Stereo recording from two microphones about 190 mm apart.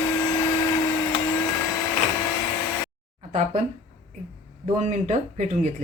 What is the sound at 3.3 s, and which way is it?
Speech, 35° right (ahead or behind).